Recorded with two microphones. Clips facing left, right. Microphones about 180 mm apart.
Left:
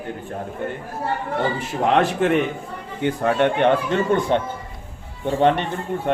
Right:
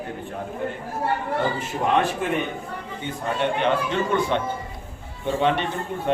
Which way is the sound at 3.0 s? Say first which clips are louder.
Left 7 dB; 75° left (ahead or behind).